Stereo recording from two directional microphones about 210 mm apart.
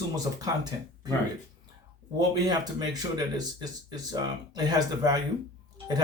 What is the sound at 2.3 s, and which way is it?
Speech, 20° right (ahead or behind).